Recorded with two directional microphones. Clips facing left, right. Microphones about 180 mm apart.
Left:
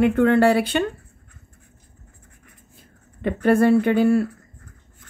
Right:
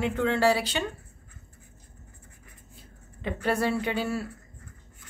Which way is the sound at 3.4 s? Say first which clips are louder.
Left 11 dB; 50° left (ahead or behind).